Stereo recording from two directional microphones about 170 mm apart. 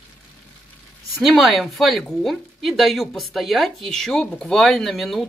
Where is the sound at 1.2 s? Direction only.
Centre (ahead or behind).